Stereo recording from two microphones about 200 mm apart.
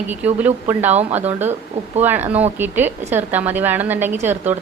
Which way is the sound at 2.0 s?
10° right (ahead or behind).